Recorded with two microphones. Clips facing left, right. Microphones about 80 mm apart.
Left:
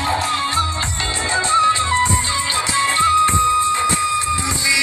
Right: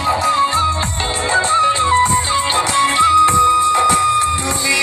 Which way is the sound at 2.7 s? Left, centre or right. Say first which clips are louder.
Right 3 dB; right.